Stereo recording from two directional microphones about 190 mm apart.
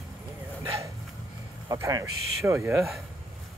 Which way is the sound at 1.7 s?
15° right (ahead or behind).